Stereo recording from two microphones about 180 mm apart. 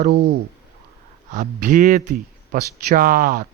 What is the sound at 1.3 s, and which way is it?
Speech, 45° right (ahead or behind).